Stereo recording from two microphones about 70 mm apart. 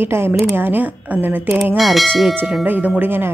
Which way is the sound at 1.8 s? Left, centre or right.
Centre.